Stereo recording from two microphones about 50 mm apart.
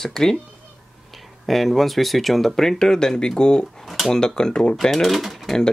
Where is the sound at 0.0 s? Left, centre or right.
Centre.